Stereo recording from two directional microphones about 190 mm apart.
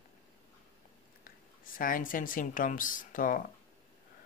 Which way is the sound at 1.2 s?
45° left (ahead or behind).